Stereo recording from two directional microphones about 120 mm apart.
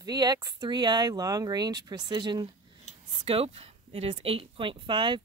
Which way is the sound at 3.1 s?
50° right (ahead or behind).